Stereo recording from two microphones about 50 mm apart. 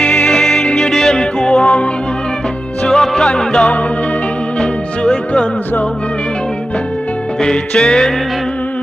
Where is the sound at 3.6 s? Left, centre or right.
Left.